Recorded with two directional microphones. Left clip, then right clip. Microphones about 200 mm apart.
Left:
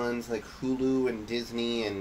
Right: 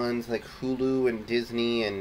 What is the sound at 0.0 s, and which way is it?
Speech, 15° right (ahead or behind).